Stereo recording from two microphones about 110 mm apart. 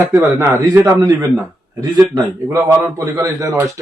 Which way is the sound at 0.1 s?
25° right (ahead or behind).